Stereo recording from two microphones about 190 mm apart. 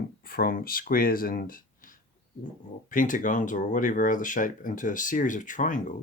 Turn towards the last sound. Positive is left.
turn(degrees=45)  # may be behind; listen again after turning